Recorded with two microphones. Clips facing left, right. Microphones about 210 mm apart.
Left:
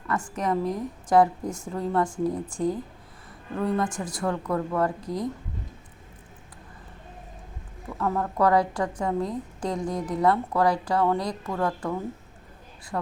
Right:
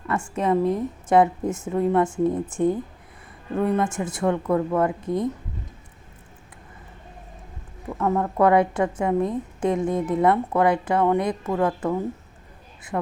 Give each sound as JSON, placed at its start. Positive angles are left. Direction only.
{"t": 0.1, "sound": "speech", "side_deg": -25}
{"t": 7.9, "sound": "speech", "side_deg": -20}